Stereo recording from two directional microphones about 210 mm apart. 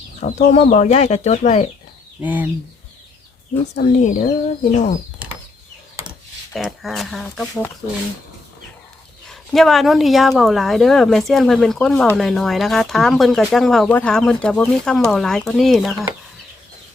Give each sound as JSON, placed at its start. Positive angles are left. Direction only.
{"t": 0.2, "sound": "speech", "side_deg": 35}
{"t": 2.2, "sound": "speech", "side_deg": -10}
{"t": 3.8, "sound": "speech", "side_deg": 40}
{"t": 6.5, "sound": "speech", "side_deg": 0}
{"t": 9.2, "sound": "speech", "side_deg": 0}